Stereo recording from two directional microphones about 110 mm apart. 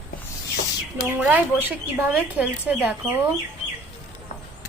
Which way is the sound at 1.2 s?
15° right (ahead or behind).